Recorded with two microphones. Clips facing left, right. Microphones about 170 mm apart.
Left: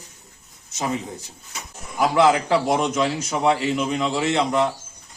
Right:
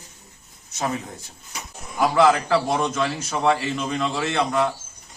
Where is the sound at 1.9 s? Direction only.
20° left (ahead or behind).